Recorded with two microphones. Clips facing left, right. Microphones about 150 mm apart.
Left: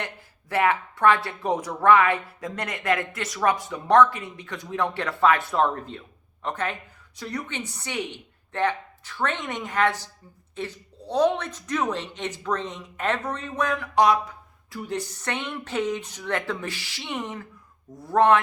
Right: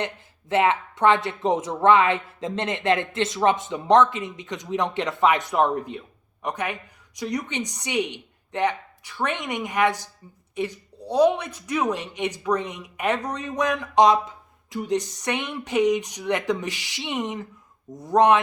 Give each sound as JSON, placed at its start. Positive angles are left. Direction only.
{"t": 0.0, "sound": "speech", "side_deg": -20}